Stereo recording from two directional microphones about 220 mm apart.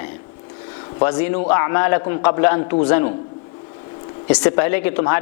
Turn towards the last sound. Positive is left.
turn(degrees=15)  # may be behind; listen again after turning